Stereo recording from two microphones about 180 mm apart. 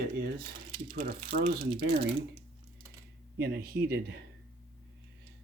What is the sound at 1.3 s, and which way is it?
Speech, 60° right (ahead or behind).